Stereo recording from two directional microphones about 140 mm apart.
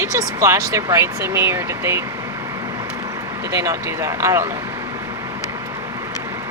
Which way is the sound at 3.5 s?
20° right (ahead or behind).